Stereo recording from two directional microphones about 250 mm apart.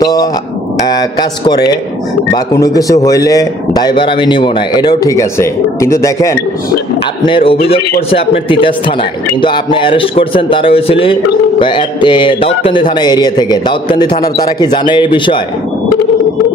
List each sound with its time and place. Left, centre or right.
0.0 s a man's voice: centre
2.3 s a man's voice: centre